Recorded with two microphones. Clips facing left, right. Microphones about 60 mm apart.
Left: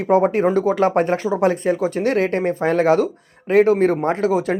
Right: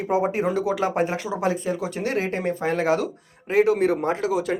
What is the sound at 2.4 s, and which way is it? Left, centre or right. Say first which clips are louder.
Speech: left 6 dB; left.